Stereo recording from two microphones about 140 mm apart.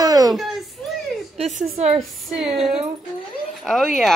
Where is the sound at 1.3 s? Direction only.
55° right (ahead or behind).